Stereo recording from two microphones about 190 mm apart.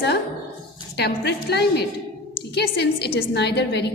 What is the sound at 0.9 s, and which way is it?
A woman's voice, 60° left (ahead or behind).